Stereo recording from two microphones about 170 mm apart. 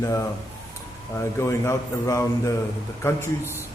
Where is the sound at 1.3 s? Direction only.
15° left (ahead or behind).